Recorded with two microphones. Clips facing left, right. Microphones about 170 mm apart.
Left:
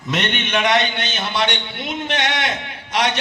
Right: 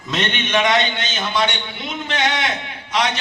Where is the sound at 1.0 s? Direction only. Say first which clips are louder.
Right 1 dB; 65° left (ahead or behind).